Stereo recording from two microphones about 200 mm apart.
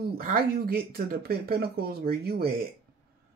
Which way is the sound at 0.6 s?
50° right (ahead or behind).